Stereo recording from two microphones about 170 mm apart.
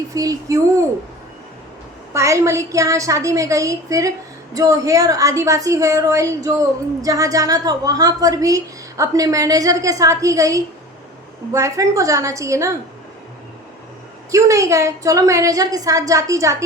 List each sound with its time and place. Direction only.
0.1 s a woman's voice: 20° right (ahead or behind)
2.1 s a woman's voice: 15° right (ahead or behind)
14.3 s a woman's voice: 20° right (ahead or behind)